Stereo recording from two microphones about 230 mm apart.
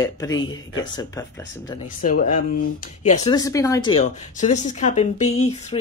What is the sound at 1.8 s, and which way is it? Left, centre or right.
Speech, left.